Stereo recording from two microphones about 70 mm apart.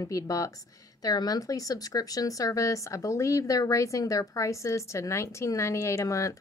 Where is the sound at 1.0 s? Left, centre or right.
Left.